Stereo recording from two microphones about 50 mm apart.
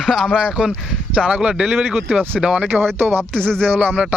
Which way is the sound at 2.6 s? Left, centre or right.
Right.